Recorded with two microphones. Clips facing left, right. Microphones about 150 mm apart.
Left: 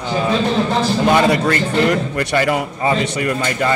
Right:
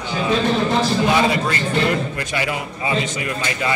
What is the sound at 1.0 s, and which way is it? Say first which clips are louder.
Speech: left 4 dB; 55° left (ahead or behind).